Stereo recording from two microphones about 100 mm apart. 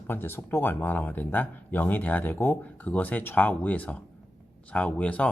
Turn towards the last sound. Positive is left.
turn(degrees=10)  # may be behind; listen again after turning